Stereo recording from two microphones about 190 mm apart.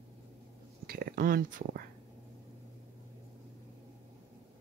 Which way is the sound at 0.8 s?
50° right (ahead or behind).